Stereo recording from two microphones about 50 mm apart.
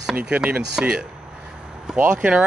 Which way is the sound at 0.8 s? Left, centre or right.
Centre.